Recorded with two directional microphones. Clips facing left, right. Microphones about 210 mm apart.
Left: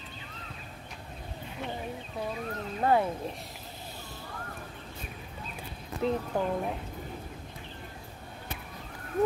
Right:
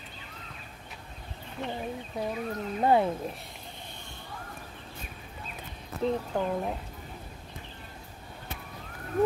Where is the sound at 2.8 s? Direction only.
20° right (ahead or behind).